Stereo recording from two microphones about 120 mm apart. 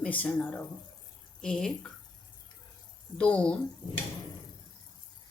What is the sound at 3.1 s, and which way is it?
Speech, 10° left (ahead or behind).